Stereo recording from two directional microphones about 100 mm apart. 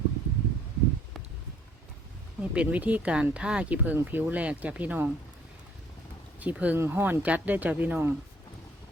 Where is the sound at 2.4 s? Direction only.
15° right (ahead or behind).